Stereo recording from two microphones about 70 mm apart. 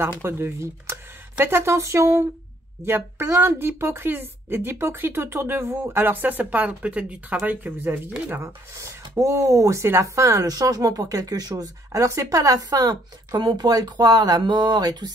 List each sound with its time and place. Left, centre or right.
0.2 s a woman's voice: right; by 7.3 s centre
7.4 s speech: right
8.7 s speech: right